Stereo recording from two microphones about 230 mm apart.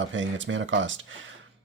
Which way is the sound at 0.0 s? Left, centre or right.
Right.